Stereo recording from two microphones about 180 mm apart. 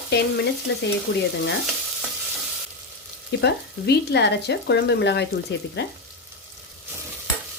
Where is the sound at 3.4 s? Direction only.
70° left (ahead or behind).